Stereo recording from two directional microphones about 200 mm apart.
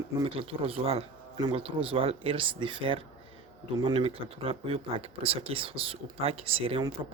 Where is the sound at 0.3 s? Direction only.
30° right (ahead or behind).